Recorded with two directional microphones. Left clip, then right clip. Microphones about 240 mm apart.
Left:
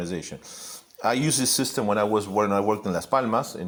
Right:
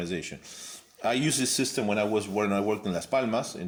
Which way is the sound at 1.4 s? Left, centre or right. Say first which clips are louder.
Left 3 dB; centre.